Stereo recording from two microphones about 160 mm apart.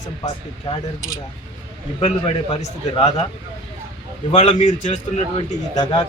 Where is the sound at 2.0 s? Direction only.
40° left (ahead or behind).